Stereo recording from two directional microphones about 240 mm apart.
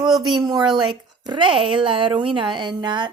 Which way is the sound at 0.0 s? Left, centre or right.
Centre.